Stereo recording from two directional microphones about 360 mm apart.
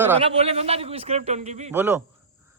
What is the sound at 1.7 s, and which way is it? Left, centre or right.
Speech, centre.